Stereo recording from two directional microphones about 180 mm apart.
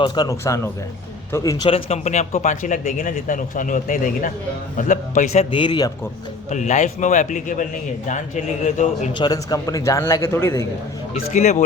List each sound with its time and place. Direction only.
0.0 s a man's voice: 20° left (ahead or behind)
6.5 s speech: 40° left (ahead or behind)
8.6 s a man's voice: 40° left (ahead or behind)
9.1 s a man's voice: 20° left (ahead or behind)
11.1 s a man's voice: 35° left (ahead or behind)